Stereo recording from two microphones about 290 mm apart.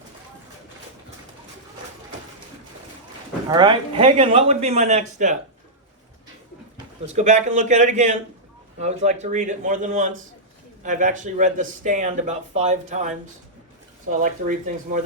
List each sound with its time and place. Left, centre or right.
3.5 s speech: centre
7.2 s speech: right